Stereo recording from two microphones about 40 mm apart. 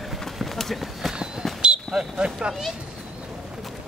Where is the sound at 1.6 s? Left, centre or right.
Right.